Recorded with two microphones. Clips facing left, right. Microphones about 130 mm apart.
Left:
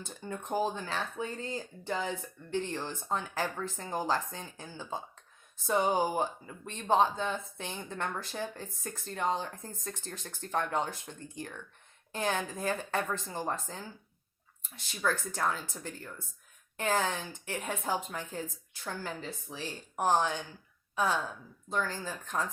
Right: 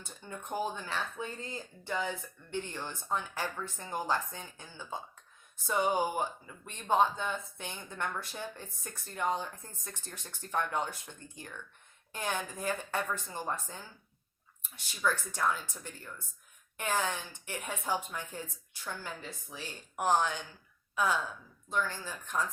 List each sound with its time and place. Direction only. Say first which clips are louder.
0.3 s speech: left 4 dB; 30° left (ahead or behind)
15.0 s speech: even; 35° left (ahead or behind)